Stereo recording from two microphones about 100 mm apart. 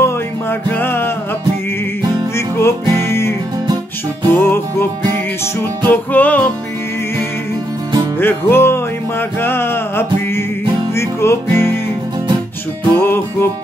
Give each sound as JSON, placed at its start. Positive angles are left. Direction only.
{"t": 0.0, "sound": "music", "side_deg": 20}
{"t": 2.3, "sound": "music", "side_deg": 25}
{"t": 5.9, "sound": "music", "side_deg": 15}
{"t": 8.2, "sound": "music", "side_deg": 20}
{"t": 12.9, "sound": "music", "side_deg": 25}